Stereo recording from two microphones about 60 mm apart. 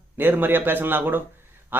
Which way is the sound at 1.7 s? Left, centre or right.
Right.